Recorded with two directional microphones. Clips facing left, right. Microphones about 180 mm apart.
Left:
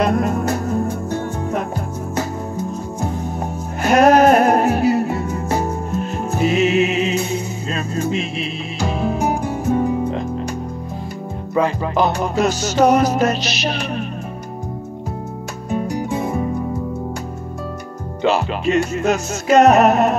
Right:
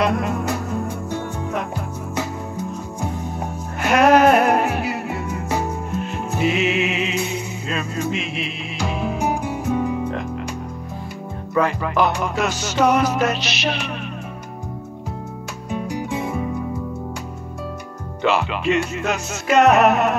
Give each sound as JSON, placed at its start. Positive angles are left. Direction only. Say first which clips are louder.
{"t": 0.0, "sound": "music", "louder": "left 3 dB", "side_deg": 45}
{"t": 11.5, "sound": "music", "louder": "left 1 dB", "side_deg": 30}
{"t": 15.7, "sound": "music", "louder": "left 4 dB", "side_deg": 40}
{"t": 18.2, "sound": "music", "louder": "left 2 dB", "side_deg": 40}